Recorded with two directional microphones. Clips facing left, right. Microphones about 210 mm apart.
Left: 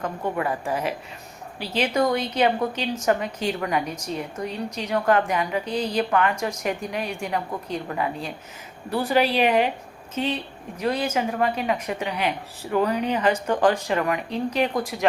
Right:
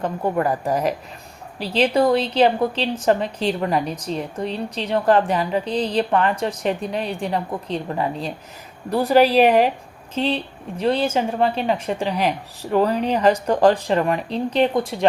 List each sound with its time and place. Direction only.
0.3 s a woman's voice: 40° right (ahead or behind)